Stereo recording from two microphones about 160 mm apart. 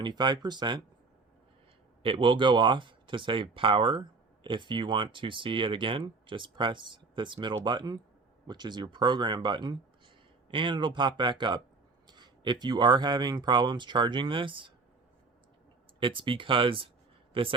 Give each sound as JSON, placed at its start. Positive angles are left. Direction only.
{"t": 0.0, "sound": "speech", "side_deg": -25}
{"t": 2.0, "sound": "speech", "side_deg": -30}
{"t": 16.0, "sound": "speech", "side_deg": -30}